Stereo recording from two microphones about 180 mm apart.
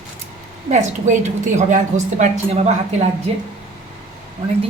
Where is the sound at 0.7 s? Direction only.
40° right (ahead or behind).